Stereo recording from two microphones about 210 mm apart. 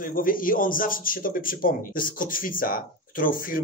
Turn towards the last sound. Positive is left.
turn(degrees=40)  # may be behind; listen again after turning